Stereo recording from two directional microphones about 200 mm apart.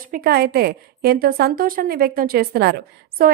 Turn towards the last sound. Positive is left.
turn(degrees=-45)  # may be behind; listen again after turning